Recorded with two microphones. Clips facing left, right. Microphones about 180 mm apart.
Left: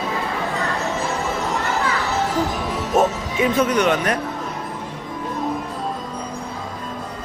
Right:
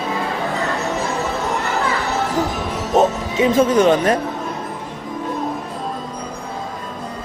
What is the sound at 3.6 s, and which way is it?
Speech, 30° right (ahead or behind).